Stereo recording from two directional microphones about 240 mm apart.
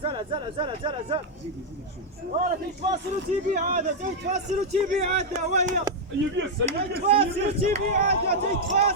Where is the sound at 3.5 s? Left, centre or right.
Right.